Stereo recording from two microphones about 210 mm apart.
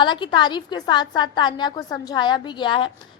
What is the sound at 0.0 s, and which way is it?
A woman's voice, 20° left (ahead or behind).